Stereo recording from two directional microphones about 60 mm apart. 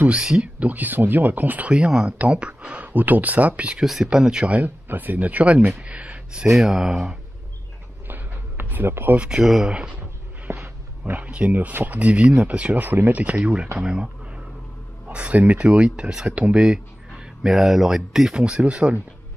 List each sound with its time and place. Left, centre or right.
0.1 s speech: centre
0.6 s speech: right
1.8 s speech: centre
2.8 s speech: right
3.8 s speech: centre
4.5 s speech: right
6.5 s speech: centre
8.1 s a sound: right
9.3 s speech: centre
10.6 s wild animals: right
11.2 s speech: right
16.6 s speech: centre
18.4 s speech: centre